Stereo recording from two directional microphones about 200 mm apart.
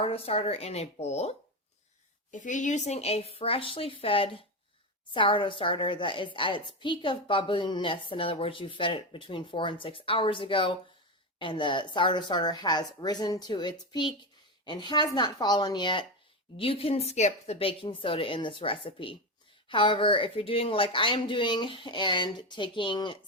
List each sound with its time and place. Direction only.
0.0 s speech: 30° left (ahead or behind)
2.3 s a woman's voice: 40° left (ahead or behind); by 23.1 s 25° left (ahead or behind)